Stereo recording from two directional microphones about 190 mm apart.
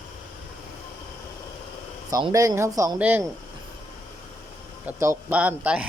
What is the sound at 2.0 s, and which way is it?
Speech, 20° right (ahead or behind).